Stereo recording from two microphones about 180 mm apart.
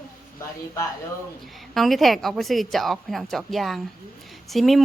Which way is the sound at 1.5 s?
Centre (ahead or behind).